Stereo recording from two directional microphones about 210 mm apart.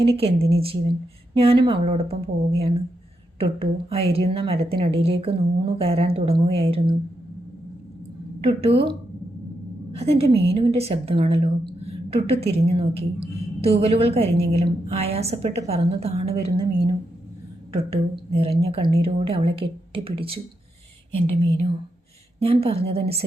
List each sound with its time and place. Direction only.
0.0 s a woman's voice: 25° right (ahead or behind)
8.4 s a woman's voice: 25° right (ahead or behind)
9.9 s a woman's voice: 30° right (ahead or behind)
17.9 s a woman's voice: 30° right (ahead or behind)